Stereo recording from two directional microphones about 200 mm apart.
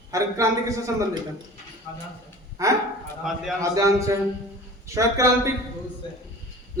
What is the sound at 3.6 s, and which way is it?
A man's voice, 15° right (ahead or behind).